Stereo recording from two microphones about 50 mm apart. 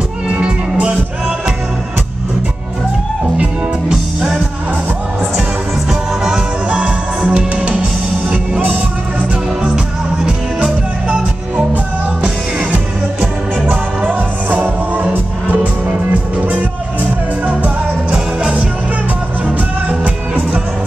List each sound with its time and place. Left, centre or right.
0.3 s music: right
5.9 s music: centre
6.7 s music: right
10.1 s music: centre
11.5 s music: right
18.1 s music: right